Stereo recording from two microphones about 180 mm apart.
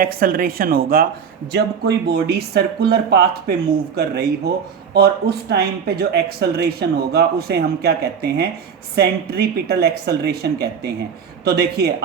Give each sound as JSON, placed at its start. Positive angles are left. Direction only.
{"t": 0.0, "sound": "speech", "side_deg": -55}
{"t": 1.5, "sound": "speech", "side_deg": -65}